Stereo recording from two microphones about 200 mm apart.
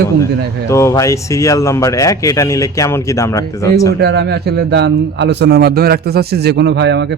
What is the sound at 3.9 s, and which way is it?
A man's voice, 55° right (ahead or behind).